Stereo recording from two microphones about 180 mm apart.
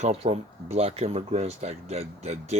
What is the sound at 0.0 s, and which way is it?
Speech, 35° right (ahead or behind).